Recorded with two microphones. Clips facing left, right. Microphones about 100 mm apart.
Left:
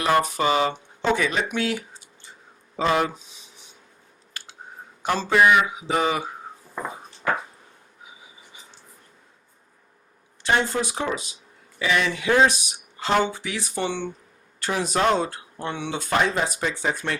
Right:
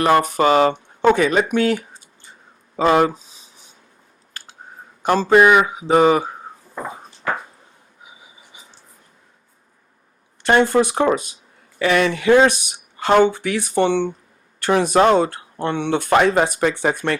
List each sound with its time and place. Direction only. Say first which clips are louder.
0.0 s speech: right 6 dB; 55° right (ahead or behind)
2.7 s a sound: right 7 dB; 45° right (ahead or behind)
5.0 s speech: right 6 dB; 50° right (ahead or behind)
10.4 s speech: right 8 dB; 60° right (ahead or behind)